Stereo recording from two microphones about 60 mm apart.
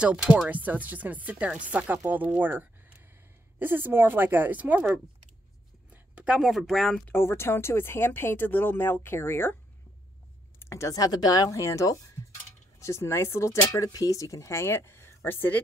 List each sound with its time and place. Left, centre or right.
0.5 s speech: right
6.3 s speech: centre
7.1 s speech: left
10.6 s a sound: left
10.9 s speech: left
12.7 s speech: left